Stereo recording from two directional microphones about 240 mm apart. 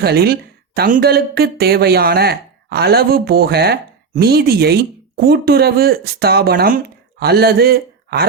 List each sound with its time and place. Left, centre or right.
0.0 s speech: right